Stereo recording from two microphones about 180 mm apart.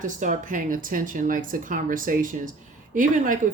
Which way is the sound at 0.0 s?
45° right (ahead or behind).